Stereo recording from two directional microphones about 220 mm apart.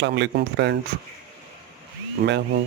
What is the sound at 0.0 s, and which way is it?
Speech, 50° right (ahead or behind).